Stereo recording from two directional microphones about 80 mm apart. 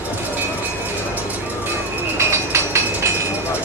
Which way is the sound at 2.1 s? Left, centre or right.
Right.